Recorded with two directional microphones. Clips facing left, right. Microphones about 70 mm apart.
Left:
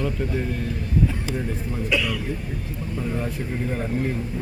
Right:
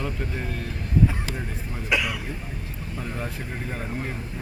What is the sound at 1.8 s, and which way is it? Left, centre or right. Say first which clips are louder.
Speech: left 1 dB; centre.